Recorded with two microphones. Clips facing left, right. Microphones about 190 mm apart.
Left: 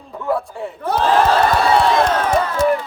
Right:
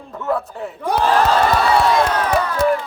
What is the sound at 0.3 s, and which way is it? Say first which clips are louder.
Speech: left 1 dB; centre (ahead or behind).